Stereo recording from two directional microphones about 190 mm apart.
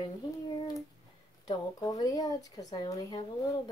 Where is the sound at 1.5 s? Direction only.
20° left (ahead or behind).